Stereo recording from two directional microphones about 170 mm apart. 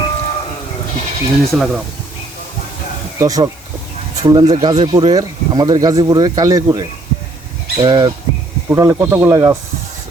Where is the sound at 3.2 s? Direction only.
20° right (ahead or behind).